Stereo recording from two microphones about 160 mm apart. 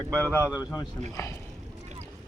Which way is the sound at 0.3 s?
15° left (ahead or behind).